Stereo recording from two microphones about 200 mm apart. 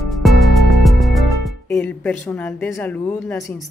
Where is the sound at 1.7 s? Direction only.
10° left (ahead or behind).